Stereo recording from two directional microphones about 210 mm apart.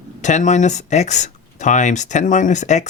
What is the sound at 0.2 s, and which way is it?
Speech, 35° left (ahead or behind).